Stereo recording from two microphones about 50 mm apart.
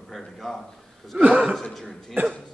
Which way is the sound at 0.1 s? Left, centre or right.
Centre.